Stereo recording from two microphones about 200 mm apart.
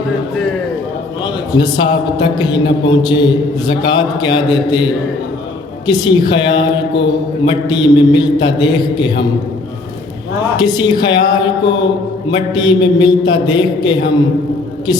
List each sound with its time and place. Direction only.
1.5 s a man's voice: 20° left (ahead or behind)
10.6 s a man's voice: 20° left (ahead or behind)